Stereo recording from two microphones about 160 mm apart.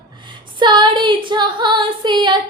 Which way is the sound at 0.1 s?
30° right (ahead or behind).